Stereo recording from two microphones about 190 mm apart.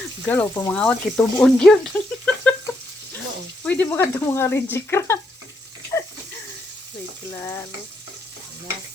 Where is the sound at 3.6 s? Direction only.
10° left (ahead or behind).